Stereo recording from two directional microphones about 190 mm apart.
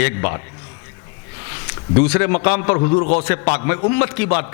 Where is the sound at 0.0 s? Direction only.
15° left (ahead or behind).